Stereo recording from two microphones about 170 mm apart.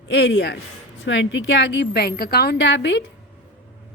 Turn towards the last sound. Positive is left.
turn(degrees=90)